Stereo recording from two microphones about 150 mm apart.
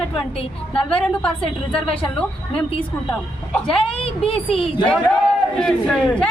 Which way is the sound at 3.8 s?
40° left (ahead or behind).